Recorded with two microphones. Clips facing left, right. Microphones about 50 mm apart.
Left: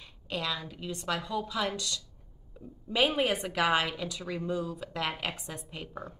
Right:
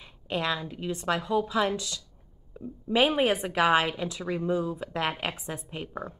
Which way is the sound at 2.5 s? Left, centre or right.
Right.